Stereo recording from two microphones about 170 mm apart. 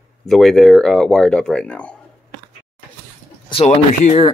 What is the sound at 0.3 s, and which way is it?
Speech, centre (ahead or behind).